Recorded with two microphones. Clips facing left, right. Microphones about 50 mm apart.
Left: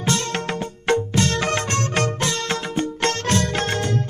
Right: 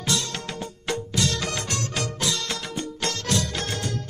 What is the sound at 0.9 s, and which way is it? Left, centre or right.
Music, left.